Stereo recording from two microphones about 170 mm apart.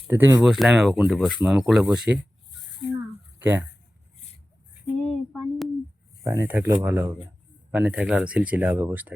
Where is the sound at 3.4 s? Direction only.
10° right (ahead or behind).